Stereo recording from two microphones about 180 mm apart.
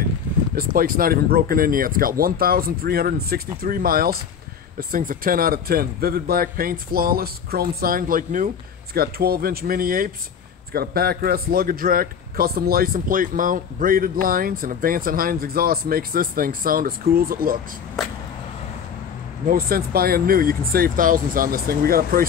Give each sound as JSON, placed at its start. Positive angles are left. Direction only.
{"t": 0.6, "sound": "a man's voice", "side_deg": -55}
{"t": 19.4, "sound": "a man's voice", "side_deg": -55}